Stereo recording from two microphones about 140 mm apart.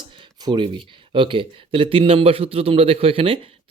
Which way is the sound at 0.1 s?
30° right (ahead or behind).